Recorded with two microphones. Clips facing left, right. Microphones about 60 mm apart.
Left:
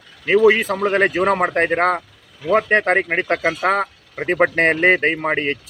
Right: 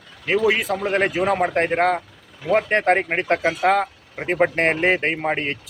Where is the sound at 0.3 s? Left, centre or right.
Left.